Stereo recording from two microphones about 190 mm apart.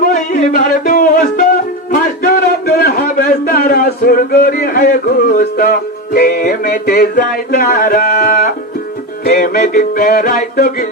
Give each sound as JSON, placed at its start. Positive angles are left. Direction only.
{"t": 0.0, "sound": "music", "side_deg": 50}